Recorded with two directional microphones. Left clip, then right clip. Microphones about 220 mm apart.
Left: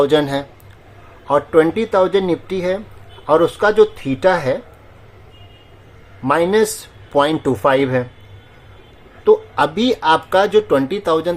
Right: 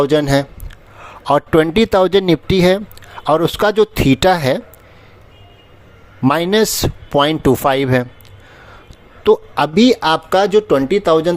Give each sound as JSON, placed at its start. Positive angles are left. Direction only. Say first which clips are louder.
{"t": 0.0, "sound": "speech", "louder": "right 1 dB", "side_deg": -30}
{"t": 1.2, "sound": "speech", "louder": "right 1 dB", "side_deg": -45}
{"t": 6.2, "sound": "speech", "louder": "right 1 dB", "side_deg": -45}
{"t": 9.2, "sound": "speech", "louder": "even", "side_deg": -40}